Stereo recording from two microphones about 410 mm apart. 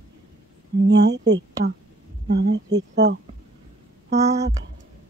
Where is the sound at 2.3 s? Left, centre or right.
Right.